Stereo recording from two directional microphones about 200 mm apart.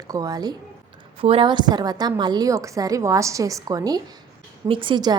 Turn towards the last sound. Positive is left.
turn(degrees=-20)  # may be behind; listen again after turning